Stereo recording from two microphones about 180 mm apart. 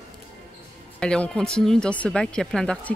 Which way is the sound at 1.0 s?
5° left (ahead or behind).